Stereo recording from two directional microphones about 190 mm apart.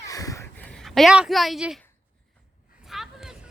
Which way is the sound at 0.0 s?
15° left (ahead or behind).